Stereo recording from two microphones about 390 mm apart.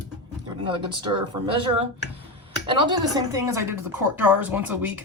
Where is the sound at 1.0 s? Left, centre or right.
Centre.